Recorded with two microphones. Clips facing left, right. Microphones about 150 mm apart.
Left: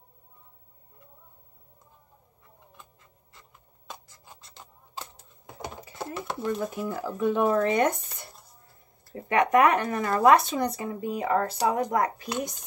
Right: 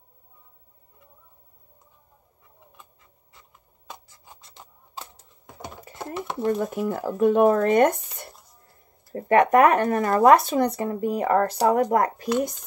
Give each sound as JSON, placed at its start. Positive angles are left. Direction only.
{"t": 5.9, "sound": "a sound", "side_deg": -20}
{"t": 6.4, "sound": "speech", "side_deg": -50}
{"t": 10.8, "sound": "speech", "side_deg": -55}